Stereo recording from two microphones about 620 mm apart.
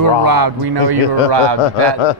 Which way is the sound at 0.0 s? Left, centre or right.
Right.